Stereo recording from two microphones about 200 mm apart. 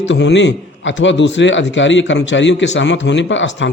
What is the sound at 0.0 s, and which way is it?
A man's voice, 65° left (ahead or behind).